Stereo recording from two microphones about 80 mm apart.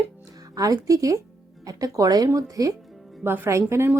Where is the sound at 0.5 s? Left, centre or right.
Right.